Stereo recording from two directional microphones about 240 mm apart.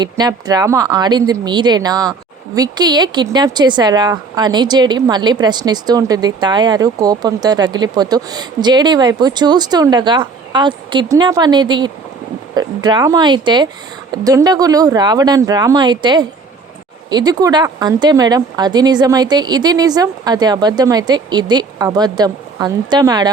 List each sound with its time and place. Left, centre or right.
0.0 s a woman's voice: centre